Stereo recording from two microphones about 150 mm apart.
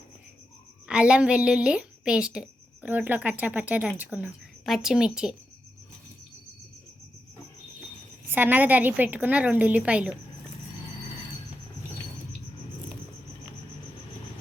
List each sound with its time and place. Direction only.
0.9 s a woman's voice: 5° right (ahead or behind)
8.3 s a woman's voice: 10° right (ahead or behind)